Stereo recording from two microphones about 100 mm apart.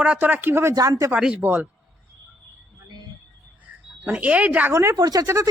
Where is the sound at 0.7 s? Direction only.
35° right (ahead or behind).